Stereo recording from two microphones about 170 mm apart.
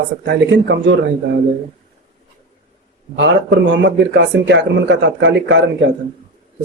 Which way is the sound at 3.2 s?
90° right.